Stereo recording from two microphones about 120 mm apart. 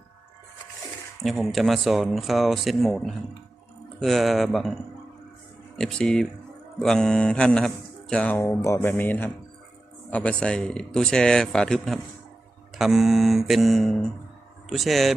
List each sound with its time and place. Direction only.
1.2 s a man's voice: centre (ahead or behind)